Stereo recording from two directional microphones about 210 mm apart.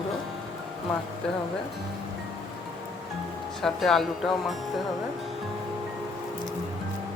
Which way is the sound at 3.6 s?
Centre (ahead or behind).